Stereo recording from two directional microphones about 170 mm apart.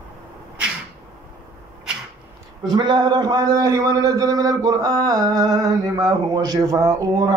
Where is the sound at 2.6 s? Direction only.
25° right (ahead or behind).